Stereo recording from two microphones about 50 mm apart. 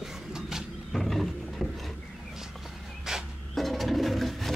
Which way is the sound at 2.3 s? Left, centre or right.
Centre.